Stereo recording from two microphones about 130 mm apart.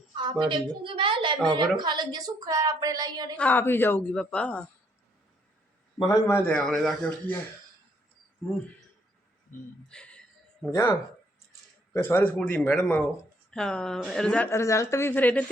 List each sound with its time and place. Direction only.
0.2 s a woman's voice: 40° right (ahead or behind)
3.3 s speech: 15° left (ahead or behind)
4.1 s speech: 5° left (ahead or behind)
6.0 s a woman's voice: 30° left (ahead or behind)
6.4 s speech: 5° left (ahead or behind)
9.9 s a sound: 5° left (ahead or behind)
12.0 s speech: 15° left (ahead or behind)
14.5 s a woman's voice: 25° left (ahead or behind)